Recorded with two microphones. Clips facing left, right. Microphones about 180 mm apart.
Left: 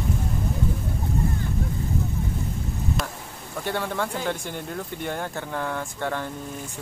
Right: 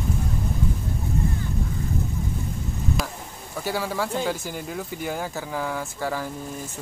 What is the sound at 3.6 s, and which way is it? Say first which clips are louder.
Speech: right 1 dB; 5° right (ahead or behind).